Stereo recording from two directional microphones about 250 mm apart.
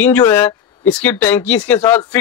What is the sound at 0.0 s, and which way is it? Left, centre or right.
Speech, centre.